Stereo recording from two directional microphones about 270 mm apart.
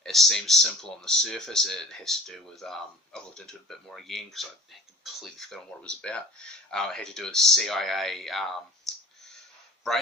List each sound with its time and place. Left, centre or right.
0.0 s speech: centre
8.9 s clicking: centre